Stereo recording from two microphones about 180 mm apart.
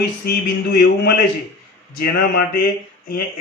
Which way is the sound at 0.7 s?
60° left (ahead or behind).